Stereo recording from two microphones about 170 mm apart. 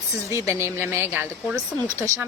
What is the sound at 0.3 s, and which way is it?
Speech, 15° right (ahead or behind).